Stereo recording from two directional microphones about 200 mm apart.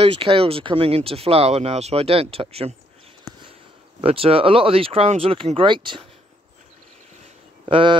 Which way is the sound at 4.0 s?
30° right (ahead or behind).